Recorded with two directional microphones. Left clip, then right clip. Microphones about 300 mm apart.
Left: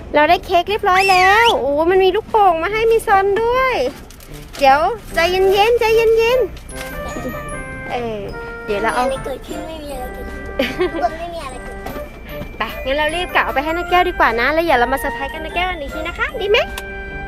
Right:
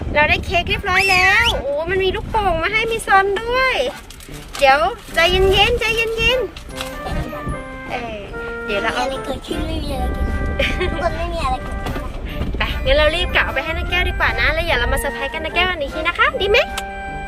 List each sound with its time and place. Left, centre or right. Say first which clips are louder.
0.1 s a woman's voice: left 3 dB; left
7.9 s music: left 4 dB; left
8.7 s speech: left 3 dB; centre
10.6 s speech: left 2 dB; centre
12.5 s a woman's voice: right 3 dB; centre